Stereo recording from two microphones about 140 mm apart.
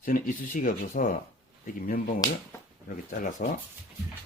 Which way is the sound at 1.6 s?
90° left.